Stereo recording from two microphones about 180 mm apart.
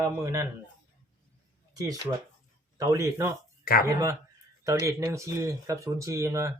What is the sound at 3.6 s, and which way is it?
Speech, 55° left (ahead or behind).